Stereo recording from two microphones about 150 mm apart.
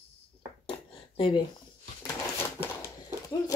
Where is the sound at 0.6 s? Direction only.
35° left (ahead or behind).